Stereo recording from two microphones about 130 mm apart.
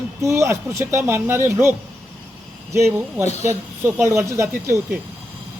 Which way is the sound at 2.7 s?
20° right (ahead or behind).